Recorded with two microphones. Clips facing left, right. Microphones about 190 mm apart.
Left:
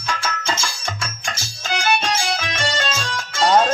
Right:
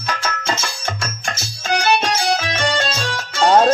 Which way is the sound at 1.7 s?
35° right (ahead or behind).